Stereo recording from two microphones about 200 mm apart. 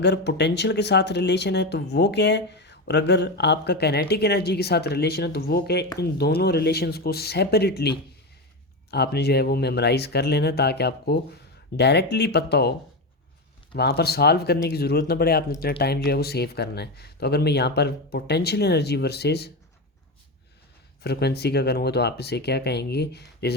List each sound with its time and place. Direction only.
0.0 s speech: 60° left (ahead or behind)
13.7 s speech: 55° left (ahead or behind)
21.0 s speech: 55° left (ahead or behind)